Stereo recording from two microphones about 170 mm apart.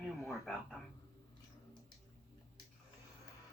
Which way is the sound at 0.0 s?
Centre (ahead or behind).